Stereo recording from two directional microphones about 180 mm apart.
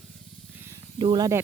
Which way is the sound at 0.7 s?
25° right (ahead or behind).